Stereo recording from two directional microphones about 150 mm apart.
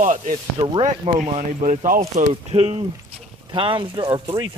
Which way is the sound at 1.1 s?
50° right (ahead or behind).